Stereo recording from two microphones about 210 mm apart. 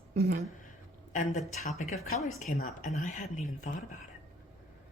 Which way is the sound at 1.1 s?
35° left (ahead or behind).